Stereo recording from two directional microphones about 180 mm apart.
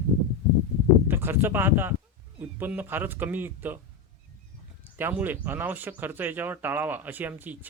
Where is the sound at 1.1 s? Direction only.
10° right (ahead or behind).